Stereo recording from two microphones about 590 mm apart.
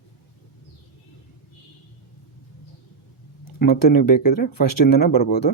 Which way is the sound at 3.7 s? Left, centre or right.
Left.